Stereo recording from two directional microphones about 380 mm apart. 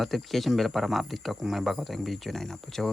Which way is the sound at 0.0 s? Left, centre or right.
Centre.